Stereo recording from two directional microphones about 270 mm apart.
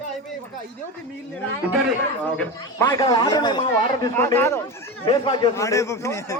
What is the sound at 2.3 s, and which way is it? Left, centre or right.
A man's voice, centre.